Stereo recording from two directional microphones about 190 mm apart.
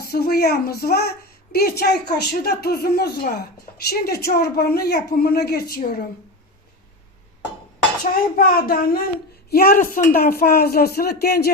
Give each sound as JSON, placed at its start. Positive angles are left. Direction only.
{"t": 0.0, "sound": "a woman's voice", "side_deg": 55}
{"t": 8.1, "sound": "a woman's voice", "side_deg": 50}